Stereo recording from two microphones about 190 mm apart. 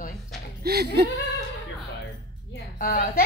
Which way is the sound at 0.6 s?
55° right (ahead or behind).